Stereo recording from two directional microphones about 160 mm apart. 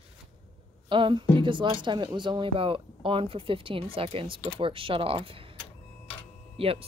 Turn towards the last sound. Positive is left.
turn(degrees=-35)  # may be behind; listen again after turning